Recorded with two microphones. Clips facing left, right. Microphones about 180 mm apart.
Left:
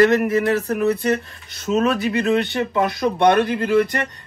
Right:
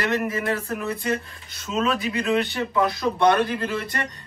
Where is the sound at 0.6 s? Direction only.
70° left (ahead or behind).